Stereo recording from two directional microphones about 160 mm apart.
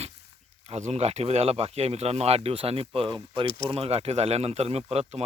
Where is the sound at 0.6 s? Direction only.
40° right (ahead or behind).